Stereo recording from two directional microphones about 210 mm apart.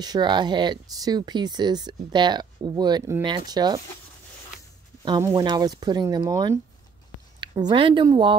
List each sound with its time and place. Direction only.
0.0 s speech: 20° right (ahead or behind)
5.0 s speech: 20° right (ahead or behind)